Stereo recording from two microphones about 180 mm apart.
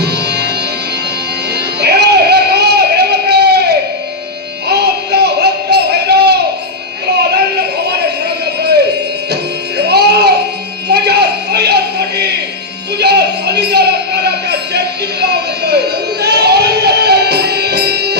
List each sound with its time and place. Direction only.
0.0 s music: 65° right (ahead or behind)
1.5 s music: 65° right (ahead or behind)
4.6 s a sound: 65° right (ahead or behind)
9.3 s music: 65° right (ahead or behind)
10.9 s a sound: 65° right (ahead or behind)
13.0 s music: 65° right (ahead or behind)